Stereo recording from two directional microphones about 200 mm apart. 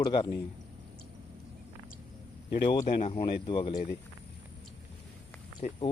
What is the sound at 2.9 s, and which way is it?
Speech, 30° left (ahead or behind).